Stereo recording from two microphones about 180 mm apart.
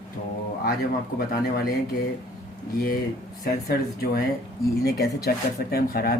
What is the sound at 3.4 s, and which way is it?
Speech, 60° left (ahead or behind).